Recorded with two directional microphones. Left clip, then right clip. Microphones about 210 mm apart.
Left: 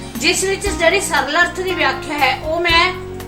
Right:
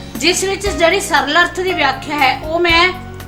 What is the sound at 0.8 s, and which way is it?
A woman's voice, 50° right (ahead or behind).